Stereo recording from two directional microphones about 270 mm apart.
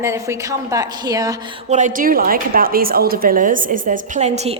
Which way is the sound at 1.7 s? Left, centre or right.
Right.